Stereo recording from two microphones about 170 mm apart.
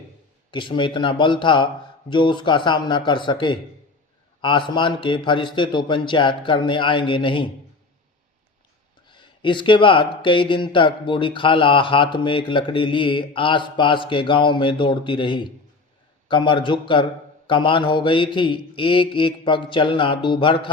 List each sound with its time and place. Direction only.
0.5 s speech: 30° left (ahead or behind)
9.0 s speech: 30° left (ahead or behind)